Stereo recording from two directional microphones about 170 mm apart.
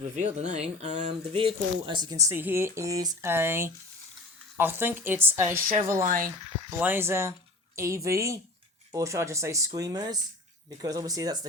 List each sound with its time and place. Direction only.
0.2 s speech: 45° right (ahead or behind); by 5.6 s 15° right (ahead or behind)
6.0 s speech: 55° right (ahead or behind)
6.7 s speech: 10° right (ahead or behind)